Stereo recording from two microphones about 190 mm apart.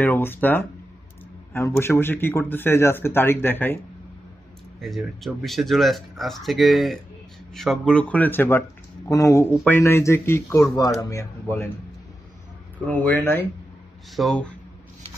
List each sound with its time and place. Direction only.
0.0 s speech: 10° left (ahead or behind)
12.8 s speech: 10° left (ahead or behind)